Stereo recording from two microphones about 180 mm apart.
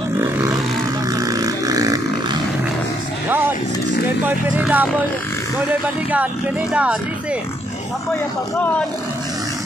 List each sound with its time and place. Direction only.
0.2 s vehicle: 20° right (ahead or behind)
4.2 s speech: 10° right (ahead or behind)
6.7 s speech: 5° right (ahead or behind)